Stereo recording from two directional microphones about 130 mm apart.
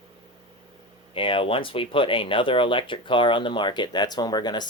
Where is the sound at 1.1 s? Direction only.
40° left (ahead or behind).